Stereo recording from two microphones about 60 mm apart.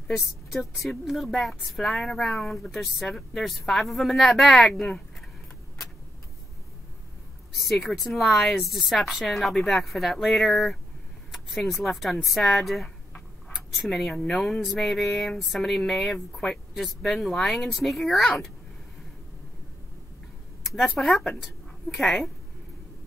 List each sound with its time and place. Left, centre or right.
0.1 s a woman's voice: centre
7.5 s a woman's voice: centre
13.5 s cutlery: centre
14.1 s speech: centre
14.4 s a woman's voice: centre
20.6 s a sound: centre
21.2 s a woman's voice: centre